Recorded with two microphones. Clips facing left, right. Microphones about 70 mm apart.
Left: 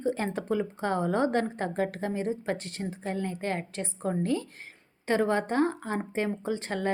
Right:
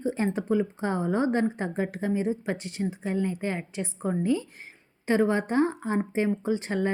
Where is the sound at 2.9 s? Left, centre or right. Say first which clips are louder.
Right 2 dB; centre.